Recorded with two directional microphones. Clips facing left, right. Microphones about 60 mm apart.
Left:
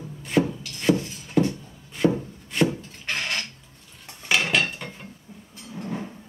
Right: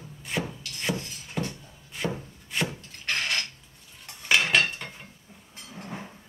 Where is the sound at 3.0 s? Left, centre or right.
Centre.